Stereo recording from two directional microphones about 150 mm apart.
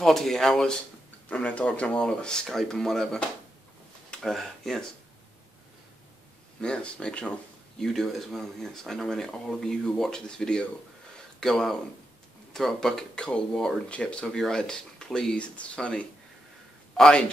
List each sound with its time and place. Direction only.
0.0 s speech: centre (ahead or behind)
6.6 s a man's voice: 5° left (ahead or behind)